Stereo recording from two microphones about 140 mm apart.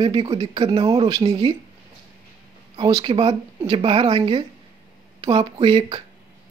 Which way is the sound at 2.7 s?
35° right (ahead or behind).